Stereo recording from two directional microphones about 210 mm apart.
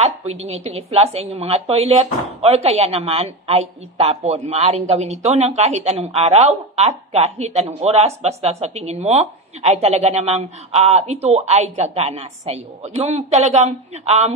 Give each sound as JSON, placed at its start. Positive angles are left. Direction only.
{"t": 0.0, "sound": "a woman's voice", "side_deg": -30}